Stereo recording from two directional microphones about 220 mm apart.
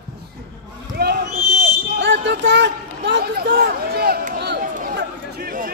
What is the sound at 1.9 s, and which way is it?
Speech, 55° right (ahead or behind).